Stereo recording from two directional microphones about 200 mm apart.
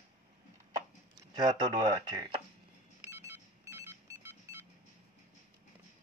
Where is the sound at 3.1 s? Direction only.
15° right (ahead or behind).